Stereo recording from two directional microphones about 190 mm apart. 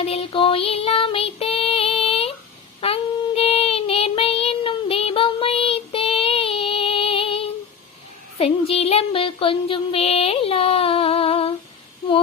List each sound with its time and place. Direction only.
0.0 s music: 30° left (ahead or behind)
2.8 s child singing: 30° left (ahead or behind)
8.4 s music: 30° left (ahead or behind)